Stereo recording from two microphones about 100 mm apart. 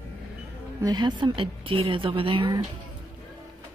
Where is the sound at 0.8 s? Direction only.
45° right (ahead or behind).